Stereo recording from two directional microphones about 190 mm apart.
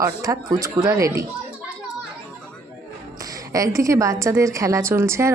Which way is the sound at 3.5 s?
15° right (ahead or behind).